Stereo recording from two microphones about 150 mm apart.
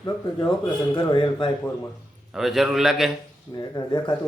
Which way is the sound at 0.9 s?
35° left (ahead or behind).